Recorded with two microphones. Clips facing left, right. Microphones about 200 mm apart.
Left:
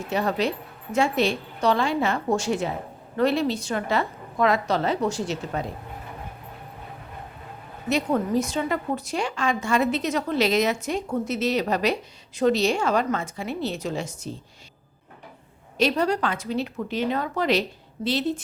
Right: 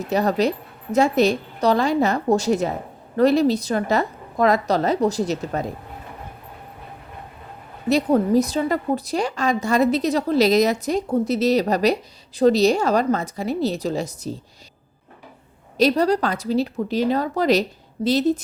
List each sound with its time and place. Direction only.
0.0 s a woman's voice: 40° right (ahead or behind)
7.9 s a woman's voice: 35° right (ahead or behind)
15.8 s a woman's voice: 35° right (ahead or behind)